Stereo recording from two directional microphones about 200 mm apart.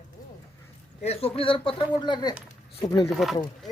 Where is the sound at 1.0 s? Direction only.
30° left (ahead or behind).